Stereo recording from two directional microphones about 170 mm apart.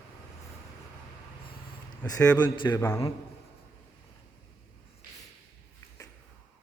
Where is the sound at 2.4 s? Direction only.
25° left (ahead or behind).